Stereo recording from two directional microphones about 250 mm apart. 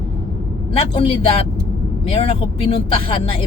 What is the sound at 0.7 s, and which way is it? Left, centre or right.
Speech, left.